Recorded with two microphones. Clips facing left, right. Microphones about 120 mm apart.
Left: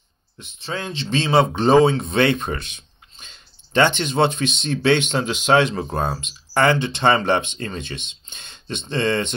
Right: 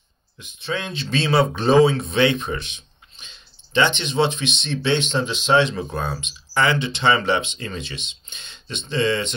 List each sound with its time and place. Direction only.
0.4 s speech: 35° left (ahead or behind)